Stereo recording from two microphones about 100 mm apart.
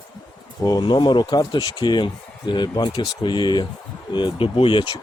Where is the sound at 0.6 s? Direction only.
45° left (ahead or behind).